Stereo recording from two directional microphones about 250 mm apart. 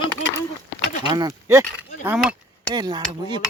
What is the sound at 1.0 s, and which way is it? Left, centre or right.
Speech, centre.